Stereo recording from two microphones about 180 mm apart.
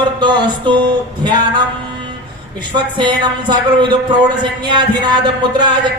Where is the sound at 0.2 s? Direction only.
25° right (ahead or behind).